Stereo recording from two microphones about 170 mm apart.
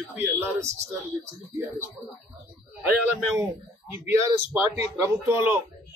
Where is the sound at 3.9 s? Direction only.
15° right (ahead or behind).